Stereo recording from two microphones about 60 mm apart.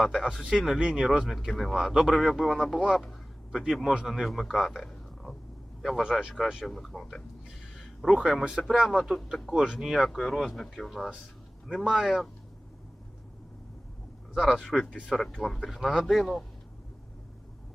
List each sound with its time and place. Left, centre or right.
0.0 s speech: centre
0.8 s speech: centre
1.5 s speech: centre
1.9 s a man's voice: centre
6.0 s speech: centre
6.7 s speech: centre
8.1 s speech: centre
14.3 s speech: centre